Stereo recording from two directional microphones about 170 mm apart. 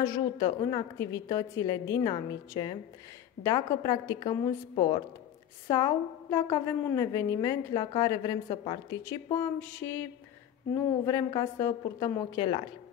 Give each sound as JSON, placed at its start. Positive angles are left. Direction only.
{"t": 0.0, "sound": "a woman's voice", "side_deg": 20}
{"t": 9.6, "sound": "a sound", "side_deg": 10}
{"t": 11.1, "sound": "a woman's voice", "side_deg": 20}